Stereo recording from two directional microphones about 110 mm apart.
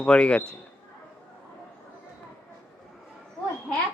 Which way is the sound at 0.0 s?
10° left (ahead or behind).